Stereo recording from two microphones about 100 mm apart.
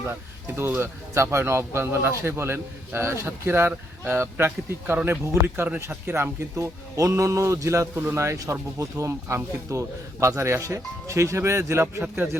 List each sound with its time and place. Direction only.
0.0 s speech: 20° right (ahead or behind)